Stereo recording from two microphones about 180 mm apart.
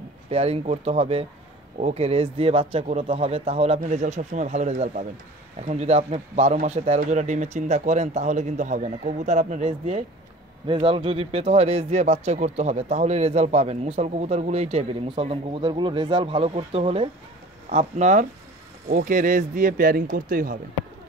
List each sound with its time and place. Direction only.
0.3 s speech: 35° right (ahead or behind); by 20.5 s 50° right (ahead or behind)